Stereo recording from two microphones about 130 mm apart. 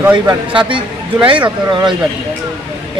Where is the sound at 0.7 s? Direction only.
40° right (ahead or behind).